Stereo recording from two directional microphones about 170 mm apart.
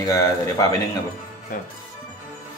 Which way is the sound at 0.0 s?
20° left (ahead or behind).